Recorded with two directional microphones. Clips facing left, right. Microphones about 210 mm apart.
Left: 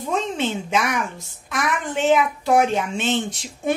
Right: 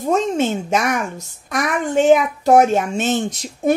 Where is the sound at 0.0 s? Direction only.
45° right (ahead or behind).